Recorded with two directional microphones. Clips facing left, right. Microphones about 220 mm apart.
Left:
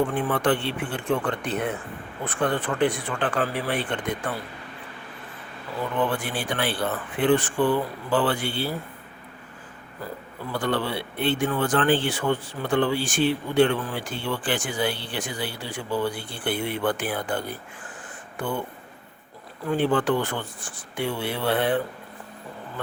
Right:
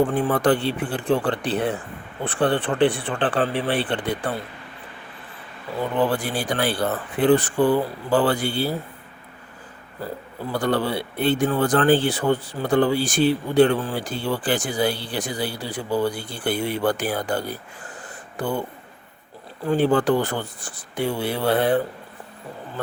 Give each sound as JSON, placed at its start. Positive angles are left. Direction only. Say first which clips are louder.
{"t": 0.1, "sound": "speech", "louder": "right 4 dB", "side_deg": -40}
{"t": 5.8, "sound": "speech", "louder": "right 4 dB", "side_deg": -35}
{"t": 10.5, "sound": "speech", "louder": "right 4 dB", "side_deg": -40}
{"t": 19.6, "sound": "speech", "louder": "right 4 dB", "side_deg": -40}